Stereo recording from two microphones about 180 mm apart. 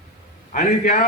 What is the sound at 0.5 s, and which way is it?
Speech, 50° left (ahead or behind).